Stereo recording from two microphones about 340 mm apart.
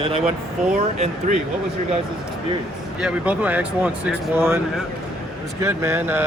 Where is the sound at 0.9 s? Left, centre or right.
Centre.